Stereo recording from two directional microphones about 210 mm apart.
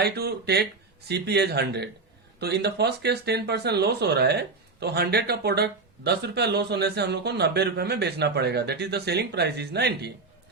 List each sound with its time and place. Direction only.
0.0 s speech: 50° right (ahead or behind)